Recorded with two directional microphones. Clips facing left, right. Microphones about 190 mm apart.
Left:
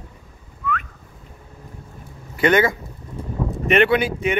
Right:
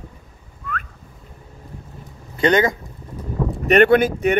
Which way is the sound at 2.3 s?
25° right (ahead or behind).